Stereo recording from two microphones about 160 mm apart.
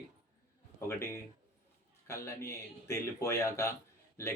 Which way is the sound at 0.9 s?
15° left (ahead or behind).